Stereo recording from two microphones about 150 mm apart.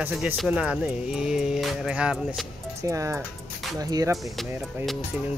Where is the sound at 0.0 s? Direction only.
10° right (ahead or behind).